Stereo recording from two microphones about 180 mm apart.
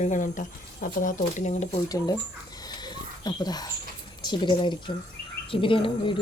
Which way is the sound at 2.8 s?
20° left (ahead or behind).